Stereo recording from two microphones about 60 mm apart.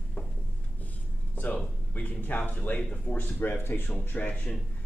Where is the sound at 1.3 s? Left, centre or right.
Left.